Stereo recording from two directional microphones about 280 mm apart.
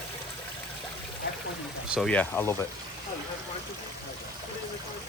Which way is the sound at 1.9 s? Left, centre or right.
Centre.